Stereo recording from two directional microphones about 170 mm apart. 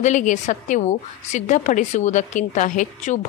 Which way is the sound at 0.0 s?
45° left (ahead or behind).